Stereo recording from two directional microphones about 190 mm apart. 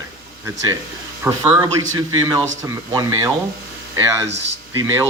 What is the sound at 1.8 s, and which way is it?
Speech, 90° right.